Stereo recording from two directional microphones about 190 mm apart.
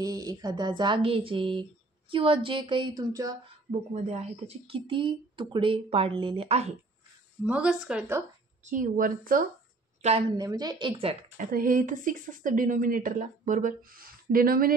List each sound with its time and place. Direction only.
0.0 s speech: 20° right (ahead or behind)
3.9 s speech: 35° right (ahead or behind)
7.4 s speech: 5° right (ahead or behind)
8.6 s speech: 45° right (ahead or behind)
10.3 s speech: 20° right (ahead or behind)
11.3 s speech: 45° right (ahead or behind)